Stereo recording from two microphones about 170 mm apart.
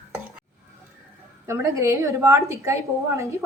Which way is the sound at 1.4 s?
15° right (ahead or behind).